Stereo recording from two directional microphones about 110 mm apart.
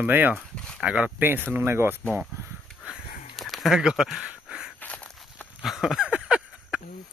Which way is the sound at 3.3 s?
Centre (ahead or behind).